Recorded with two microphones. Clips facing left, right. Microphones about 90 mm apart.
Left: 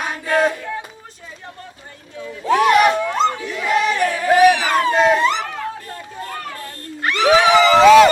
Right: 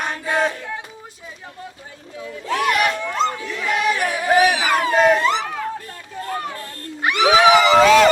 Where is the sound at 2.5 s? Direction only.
25° left (ahead or behind).